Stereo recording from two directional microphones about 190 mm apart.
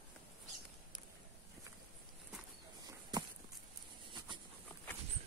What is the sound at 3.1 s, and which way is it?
Walk, 20° right (ahead or behind).